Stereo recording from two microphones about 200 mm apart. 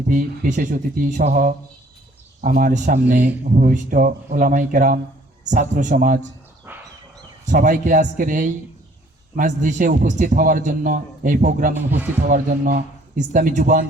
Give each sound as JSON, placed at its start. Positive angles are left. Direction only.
{"t": 0.1, "sound": "a man's voice", "side_deg": -40}
{"t": 6.7, "sound": "dog", "side_deg": -10}
{"t": 7.4, "sound": "a man's voice", "side_deg": -40}
{"t": 11.7, "sound": "speech", "side_deg": -10}
{"t": 13.1, "sound": "a man's voice", "side_deg": -40}